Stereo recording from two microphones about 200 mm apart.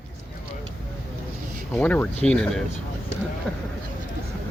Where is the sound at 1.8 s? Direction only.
10° left (ahead or behind).